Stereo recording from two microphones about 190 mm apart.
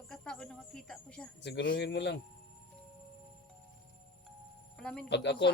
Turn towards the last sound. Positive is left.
turn(degrees=65)  # may be behind; listen again after turning